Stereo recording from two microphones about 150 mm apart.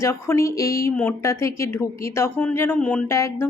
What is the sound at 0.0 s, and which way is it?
Speech, 20° left (ahead or behind).